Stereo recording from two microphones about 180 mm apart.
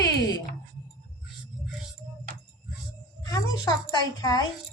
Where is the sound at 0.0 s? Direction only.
20° left (ahead or behind).